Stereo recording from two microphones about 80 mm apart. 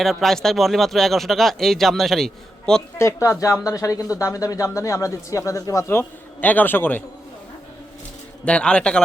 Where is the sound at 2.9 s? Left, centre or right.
Left.